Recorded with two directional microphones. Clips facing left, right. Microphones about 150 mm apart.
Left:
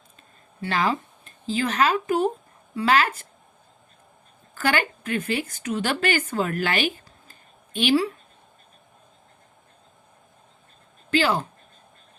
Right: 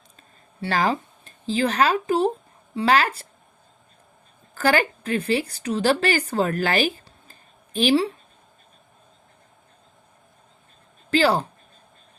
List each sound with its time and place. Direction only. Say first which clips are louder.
0.6 s speech: right 2 dB; 35° right (ahead or behind)
4.5 s speech: right 4 dB; 35° right (ahead or behind)
11.1 s speech: right 3 dB; 35° right (ahead or behind)